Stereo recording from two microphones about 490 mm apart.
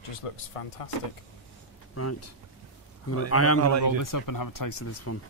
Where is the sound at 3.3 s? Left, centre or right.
Left.